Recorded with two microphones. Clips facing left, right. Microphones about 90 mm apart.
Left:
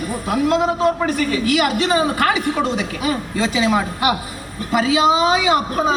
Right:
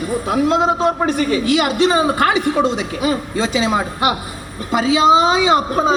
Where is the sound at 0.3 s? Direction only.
30° right (ahead or behind).